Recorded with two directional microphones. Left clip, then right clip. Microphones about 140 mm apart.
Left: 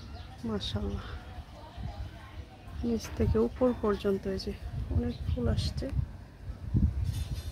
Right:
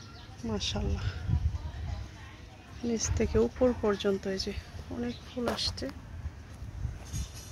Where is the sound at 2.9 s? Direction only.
5° right (ahead or behind).